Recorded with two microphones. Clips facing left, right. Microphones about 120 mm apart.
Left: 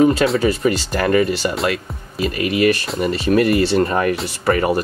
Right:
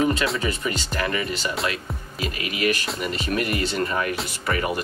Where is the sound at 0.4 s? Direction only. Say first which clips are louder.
Left 9 dB; 35° left (ahead or behind).